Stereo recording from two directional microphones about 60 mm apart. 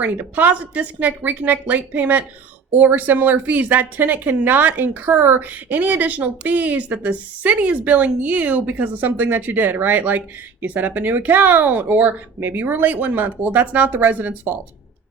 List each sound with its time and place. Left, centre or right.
0.0 s a woman's voice: right